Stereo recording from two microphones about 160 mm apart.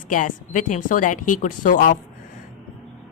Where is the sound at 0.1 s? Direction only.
55° left (ahead or behind).